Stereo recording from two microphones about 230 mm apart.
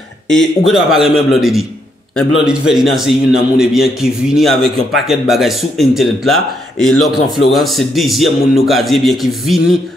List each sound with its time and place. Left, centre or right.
0.3 s a man's voice: centre